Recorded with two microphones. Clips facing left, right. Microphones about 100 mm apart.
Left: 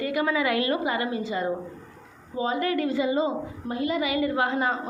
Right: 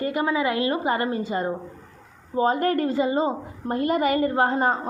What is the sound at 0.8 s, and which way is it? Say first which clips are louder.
A woman's voice: right 3 dB; 40° right (ahead or behind).